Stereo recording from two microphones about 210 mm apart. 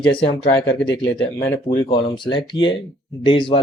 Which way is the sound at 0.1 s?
25° left (ahead or behind).